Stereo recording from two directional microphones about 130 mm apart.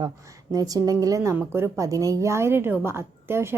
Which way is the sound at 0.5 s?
30° right (ahead or behind).